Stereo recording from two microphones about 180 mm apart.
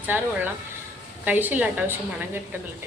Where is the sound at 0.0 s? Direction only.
10° right (ahead or behind).